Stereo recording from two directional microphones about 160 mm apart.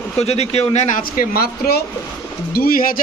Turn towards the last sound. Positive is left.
turn(degrees=60)  # may be behind; listen again after turning